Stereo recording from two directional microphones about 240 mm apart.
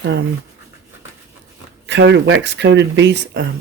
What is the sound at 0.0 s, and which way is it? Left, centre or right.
Speech, right.